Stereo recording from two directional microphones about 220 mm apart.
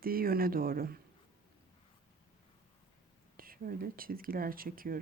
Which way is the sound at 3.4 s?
40° right (ahead or behind).